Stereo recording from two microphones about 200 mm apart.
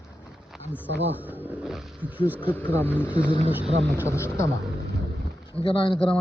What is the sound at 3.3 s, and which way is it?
Speech, 25° left (ahead or behind).